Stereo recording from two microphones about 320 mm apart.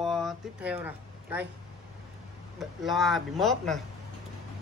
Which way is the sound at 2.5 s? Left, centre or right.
Centre.